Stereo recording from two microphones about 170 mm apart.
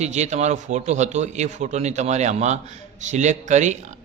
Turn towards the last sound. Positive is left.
turn(degrees=-45)  # may be behind; listen again after turning